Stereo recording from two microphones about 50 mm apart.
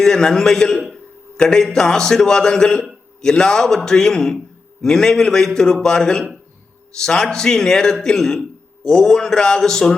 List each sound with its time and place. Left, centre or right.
0.0 s a man's voice: centre
0.8 s a man's voice: centre
1.4 s a man's voice: centre